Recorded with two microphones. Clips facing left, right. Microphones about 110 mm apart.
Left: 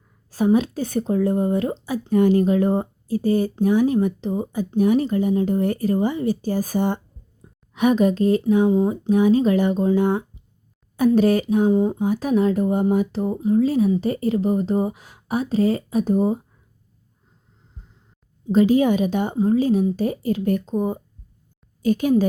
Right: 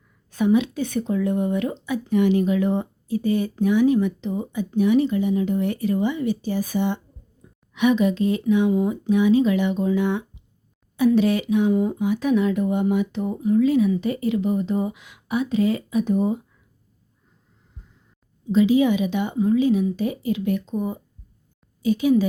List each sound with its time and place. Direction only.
0.3 s speech: 35° left (ahead or behind)
12.0 s speech: 40° left (ahead or behind)
18.5 s a woman's voice: 45° left (ahead or behind)
21.8 s a woman's voice: 50° left (ahead or behind)